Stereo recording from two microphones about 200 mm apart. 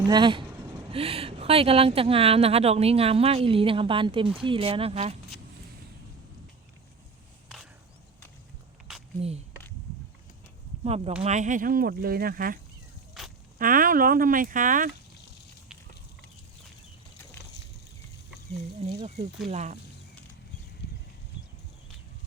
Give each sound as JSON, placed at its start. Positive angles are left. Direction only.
{"t": 0.1, "sound": "speech", "side_deg": -25}
{"t": 10.8, "sound": "speech", "side_deg": -30}
{"t": 13.2, "sound": "walk", "side_deg": 0}
{"t": 13.6, "sound": "speech", "side_deg": -45}
{"t": 18.8, "sound": "speech", "side_deg": -30}